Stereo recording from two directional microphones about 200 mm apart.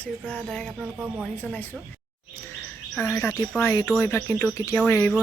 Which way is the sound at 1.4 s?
10° left (ahead or behind).